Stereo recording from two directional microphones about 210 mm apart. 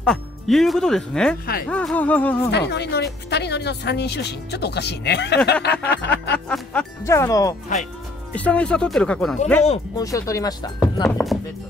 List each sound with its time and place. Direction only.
0.0 s speech: centre (ahead or behind)
2.5 s speech: 55° left (ahead or behind)
5.5 s a sound: 55° left (ahead or behind)
6.3 s speech: 5° left (ahead or behind)
9.9 s speech: 15° left (ahead or behind)
11.1 s speech: 5° left (ahead or behind)